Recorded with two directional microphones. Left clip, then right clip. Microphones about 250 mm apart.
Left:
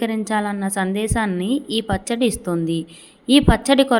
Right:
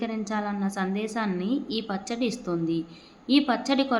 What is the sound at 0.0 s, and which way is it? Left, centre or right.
A woman's voice, left.